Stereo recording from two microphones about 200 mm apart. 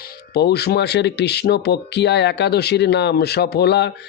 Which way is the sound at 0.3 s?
55° left (ahead or behind).